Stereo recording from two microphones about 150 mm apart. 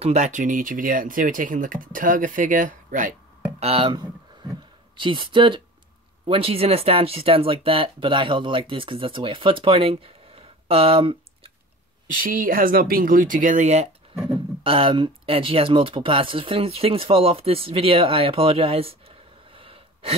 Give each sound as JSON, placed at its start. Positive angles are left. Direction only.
{"t": 0.0, "sound": "speech", "side_deg": -50}
{"t": 3.5, "sound": "a sound", "side_deg": -40}
{"t": 6.2, "sound": "speech", "side_deg": -40}
{"t": 12.1, "sound": "speech", "side_deg": -65}
{"t": 14.2, "sound": "speech", "side_deg": -35}